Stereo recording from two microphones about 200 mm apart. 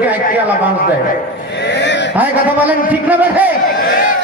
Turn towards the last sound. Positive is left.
turn(degrees=-10)  # may be behind; listen again after turning